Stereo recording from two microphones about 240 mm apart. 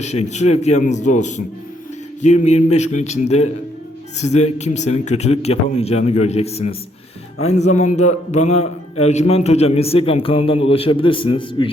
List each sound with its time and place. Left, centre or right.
0.0 s a man's voice: left